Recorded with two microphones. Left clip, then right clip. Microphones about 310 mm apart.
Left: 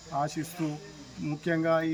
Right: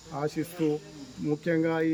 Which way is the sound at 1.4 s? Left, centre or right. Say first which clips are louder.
Left 2 dB; centre.